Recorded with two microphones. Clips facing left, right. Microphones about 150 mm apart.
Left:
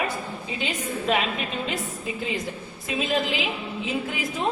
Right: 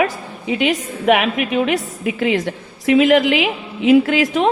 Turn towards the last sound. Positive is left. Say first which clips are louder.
# right 11 dB
turn(degrees=-85)